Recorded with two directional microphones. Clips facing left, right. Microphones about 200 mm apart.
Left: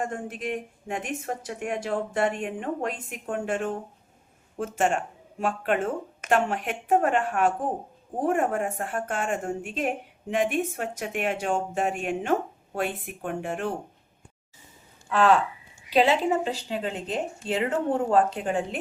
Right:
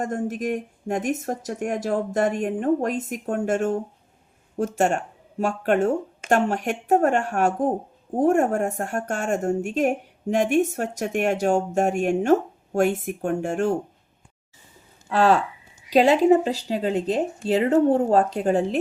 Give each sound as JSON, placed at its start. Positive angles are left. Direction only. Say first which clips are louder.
{"t": 0.0, "sound": "a woman's voice", "louder": "right 5 dB", "side_deg": -40}
{"t": 15.1, "sound": "speech", "louder": "right 2 dB", "side_deg": -40}